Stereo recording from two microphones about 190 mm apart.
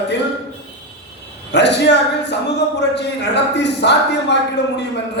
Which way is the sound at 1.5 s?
65° left (ahead or behind).